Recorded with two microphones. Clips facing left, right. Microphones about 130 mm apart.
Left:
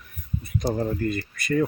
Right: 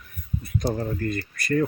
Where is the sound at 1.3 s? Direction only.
Centre (ahead or behind).